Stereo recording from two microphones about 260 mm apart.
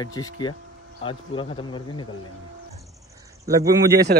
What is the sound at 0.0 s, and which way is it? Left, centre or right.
A man's voice, centre.